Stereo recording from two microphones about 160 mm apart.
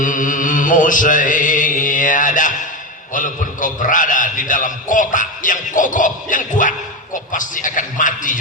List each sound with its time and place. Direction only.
0.0 s mantra: 55° left (ahead or behind)
3.1 s a man's voice: 55° left (ahead or behind)